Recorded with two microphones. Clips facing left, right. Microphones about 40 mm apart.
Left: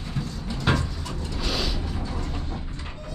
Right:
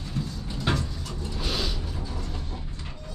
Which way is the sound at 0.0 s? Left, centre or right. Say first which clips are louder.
Left 1 dB; centre.